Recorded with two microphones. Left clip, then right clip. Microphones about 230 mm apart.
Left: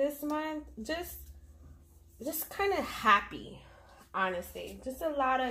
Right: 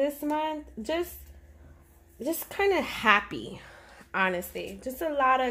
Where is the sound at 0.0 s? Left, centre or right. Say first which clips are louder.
Right 5 dB; right.